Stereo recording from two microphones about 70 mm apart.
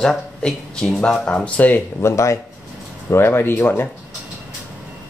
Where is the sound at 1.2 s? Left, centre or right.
Centre.